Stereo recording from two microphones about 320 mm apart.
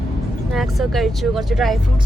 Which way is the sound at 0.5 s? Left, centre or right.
Centre.